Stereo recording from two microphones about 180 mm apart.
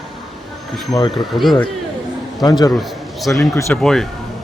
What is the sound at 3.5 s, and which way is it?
Speech, 15° left (ahead or behind).